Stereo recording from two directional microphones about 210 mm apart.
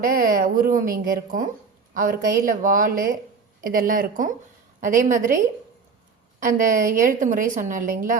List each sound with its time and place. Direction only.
0.0 s a woman's voice: 45° right (ahead or behind)